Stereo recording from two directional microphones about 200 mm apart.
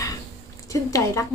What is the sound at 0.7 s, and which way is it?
Speech, 15° left (ahead or behind).